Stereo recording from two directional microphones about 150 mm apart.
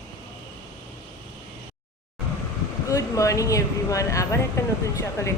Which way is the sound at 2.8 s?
20° left (ahead or behind).